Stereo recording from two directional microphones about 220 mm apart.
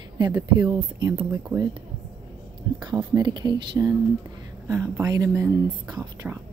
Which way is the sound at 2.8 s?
20° right (ahead or behind).